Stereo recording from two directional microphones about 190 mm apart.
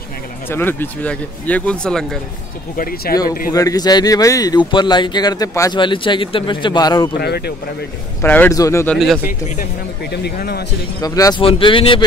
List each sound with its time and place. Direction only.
0.5 s speech: 10° left (ahead or behind)
3.1 s speech: 50° left (ahead or behind)
3.5 s speech: 20° left (ahead or behind)
7.2 s speech: 55° left (ahead or behind)
8.2 s speech: 10° left (ahead or behind)
8.9 s speech: centre (ahead or behind)
10.2 s speech: 55° left (ahead or behind)
11.0 s speech: 20° left (ahead or behind)